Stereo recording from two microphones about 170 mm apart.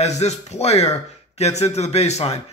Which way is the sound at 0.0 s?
40° left (ahead or behind).